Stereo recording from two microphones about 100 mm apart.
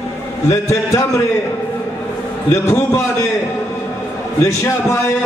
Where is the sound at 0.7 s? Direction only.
35° left (ahead or behind).